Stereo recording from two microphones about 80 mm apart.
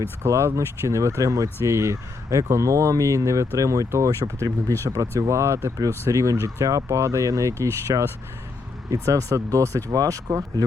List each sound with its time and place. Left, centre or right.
0.2 s speech: right